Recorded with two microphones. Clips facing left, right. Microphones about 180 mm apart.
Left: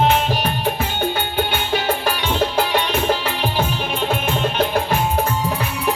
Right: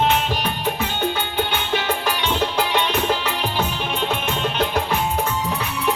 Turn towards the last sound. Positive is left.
turn(degrees=35)  # may be behind; listen again after turning